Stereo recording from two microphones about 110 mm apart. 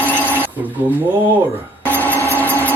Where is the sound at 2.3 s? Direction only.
15° left (ahead or behind).